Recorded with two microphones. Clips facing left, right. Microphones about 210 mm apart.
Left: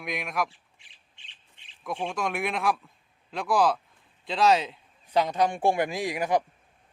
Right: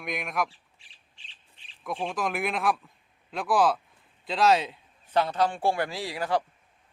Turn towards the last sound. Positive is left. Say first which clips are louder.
# left 3 dB
turn(degrees=15)  # may be behind; listen again after turning